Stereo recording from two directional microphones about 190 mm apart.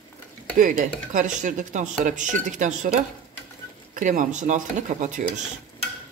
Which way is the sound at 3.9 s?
40° right (ahead or behind).